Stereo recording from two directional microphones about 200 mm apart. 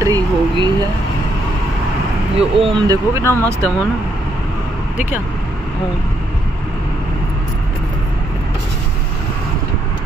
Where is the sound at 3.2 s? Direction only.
15° left (ahead or behind).